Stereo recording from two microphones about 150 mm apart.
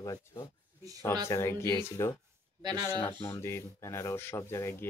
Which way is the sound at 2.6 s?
25° right (ahead or behind).